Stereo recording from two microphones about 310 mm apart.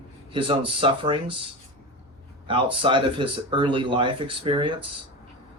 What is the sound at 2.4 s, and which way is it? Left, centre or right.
Speech, centre.